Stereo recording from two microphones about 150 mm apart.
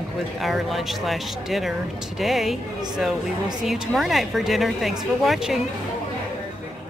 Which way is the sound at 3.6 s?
Centre (ahead or behind).